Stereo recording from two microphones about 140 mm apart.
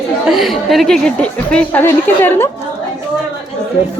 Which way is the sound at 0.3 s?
Centre (ahead or behind).